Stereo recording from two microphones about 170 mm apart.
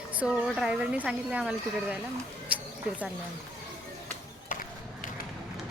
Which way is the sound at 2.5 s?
10° right (ahead or behind).